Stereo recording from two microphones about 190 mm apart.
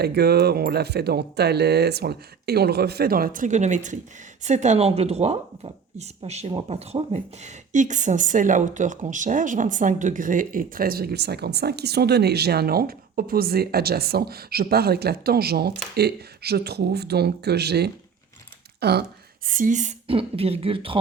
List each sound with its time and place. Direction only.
0.0 s speech: 55° right (ahead or behind)
19.5 s speech: 45° right (ahead or behind); by 21.0 s 30° right (ahead or behind)